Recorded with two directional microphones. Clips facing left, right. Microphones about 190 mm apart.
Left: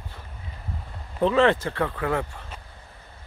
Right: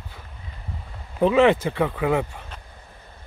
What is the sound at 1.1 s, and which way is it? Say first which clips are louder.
Speech: right 3 dB; 10° right (ahead or behind).